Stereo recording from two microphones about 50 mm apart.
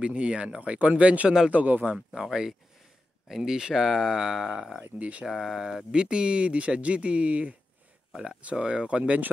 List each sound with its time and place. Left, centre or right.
0.0 s speech: right
2.0 s speech: centre
4.9 s speech: right
5.2 s speech: centre; by 7.5 s right
8.1 s speech: centre
8.4 s speech: right